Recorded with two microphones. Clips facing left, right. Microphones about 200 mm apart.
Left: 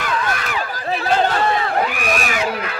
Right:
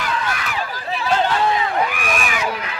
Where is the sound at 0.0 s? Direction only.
45° left (ahead or behind).